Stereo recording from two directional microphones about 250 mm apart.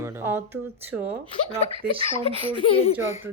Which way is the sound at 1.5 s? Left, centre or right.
Right.